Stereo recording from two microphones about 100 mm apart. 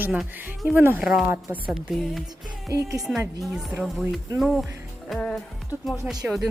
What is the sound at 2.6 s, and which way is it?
Speech, 30° right (ahead or behind).